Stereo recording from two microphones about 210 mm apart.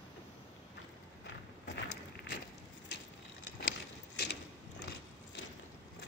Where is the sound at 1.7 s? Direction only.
50° left (ahead or behind).